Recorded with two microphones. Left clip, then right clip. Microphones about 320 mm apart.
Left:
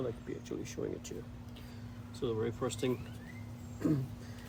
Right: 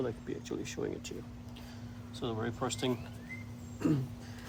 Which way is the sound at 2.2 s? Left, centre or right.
Centre.